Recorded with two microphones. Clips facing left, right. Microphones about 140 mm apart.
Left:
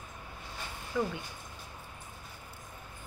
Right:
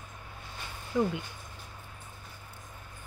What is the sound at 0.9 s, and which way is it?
Speech, 20° right (ahead or behind).